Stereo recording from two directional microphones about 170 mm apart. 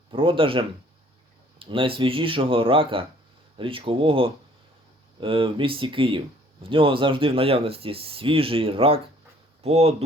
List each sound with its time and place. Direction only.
0.1 s speech: 30° right (ahead or behind)